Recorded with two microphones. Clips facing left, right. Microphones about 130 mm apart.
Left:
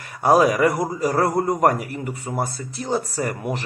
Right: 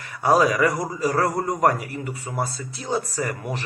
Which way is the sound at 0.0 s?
50° left (ahead or behind).